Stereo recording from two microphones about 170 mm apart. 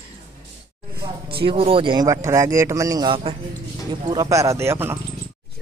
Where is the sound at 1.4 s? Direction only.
30° right (ahead or behind); by 5.0 s 15° right (ahead or behind).